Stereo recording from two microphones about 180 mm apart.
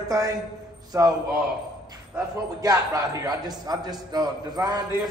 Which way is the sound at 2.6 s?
20° right (ahead or behind).